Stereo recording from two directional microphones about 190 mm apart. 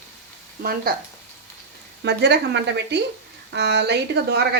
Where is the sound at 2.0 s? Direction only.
60° right (ahead or behind).